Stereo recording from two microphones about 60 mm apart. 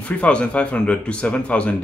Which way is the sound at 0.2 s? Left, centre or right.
Centre.